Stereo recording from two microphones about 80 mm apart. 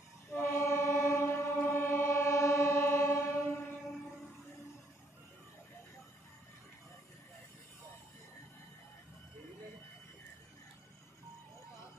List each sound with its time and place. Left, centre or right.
0.4 s train: left